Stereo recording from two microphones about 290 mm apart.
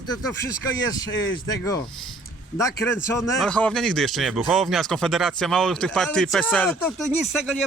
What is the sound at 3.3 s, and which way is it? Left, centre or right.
Speech, centre.